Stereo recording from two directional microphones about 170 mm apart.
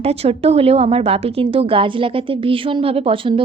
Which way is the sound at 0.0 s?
35° right (ahead or behind).